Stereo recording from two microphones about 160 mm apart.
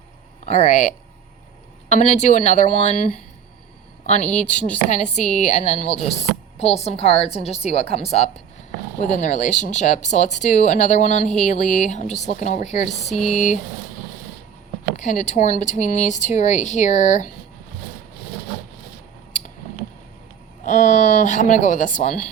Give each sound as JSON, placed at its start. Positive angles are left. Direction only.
{"t": 0.4, "sound": "speech", "side_deg": 45}
{"t": 4.0, "sound": "a woman's voice", "side_deg": 45}
{"t": 13.1, "sound": "speech", "side_deg": 0}
{"t": 14.9, "sound": "speech", "side_deg": 45}
{"t": 20.7, "sound": "speech", "side_deg": 50}